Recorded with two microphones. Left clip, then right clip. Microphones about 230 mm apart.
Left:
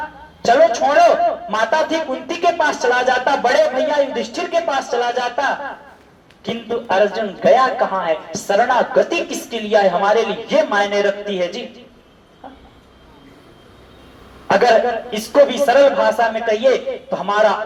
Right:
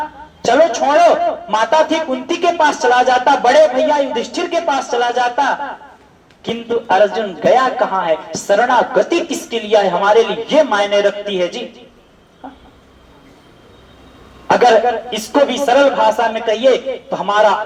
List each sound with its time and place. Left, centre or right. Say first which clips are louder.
0.4 s a man's voice: right 1 dB; right
14.4 s a man's voice: right 3 dB; right